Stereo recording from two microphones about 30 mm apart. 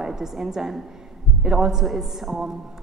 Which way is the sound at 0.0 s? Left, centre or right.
Right.